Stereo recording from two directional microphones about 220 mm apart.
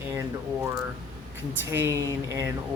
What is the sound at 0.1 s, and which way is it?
Speech, 10° right (ahead or behind).